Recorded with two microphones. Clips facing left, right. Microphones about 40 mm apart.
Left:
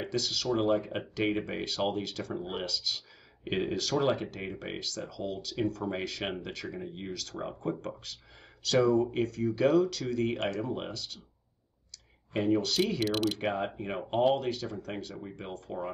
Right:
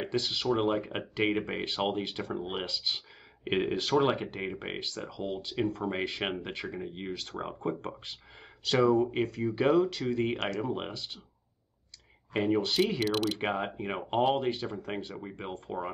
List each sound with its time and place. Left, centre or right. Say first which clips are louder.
0.0 s speech: right 1 dB; right
12.4 s speech: right 1 dB; right
13.0 s speech: even; centre
13.4 s speech: even; right